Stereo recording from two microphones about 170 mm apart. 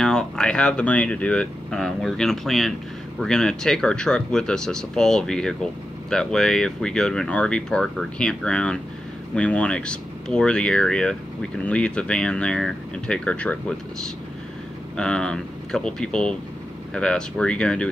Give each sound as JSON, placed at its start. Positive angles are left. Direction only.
{"t": 0.0, "sound": "speech", "side_deg": 5}